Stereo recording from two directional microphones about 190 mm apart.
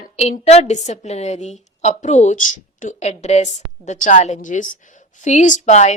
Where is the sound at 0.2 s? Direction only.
35° left (ahead or behind).